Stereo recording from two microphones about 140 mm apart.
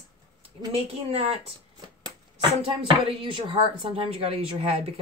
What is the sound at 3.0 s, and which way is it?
A woman's voice, 40° right (ahead or behind).